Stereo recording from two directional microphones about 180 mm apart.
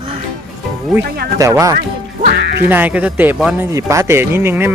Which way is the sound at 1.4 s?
15° right (ahead or behind).